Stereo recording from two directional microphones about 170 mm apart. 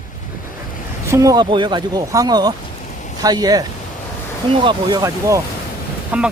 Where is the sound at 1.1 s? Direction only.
20° right (ahead or behind).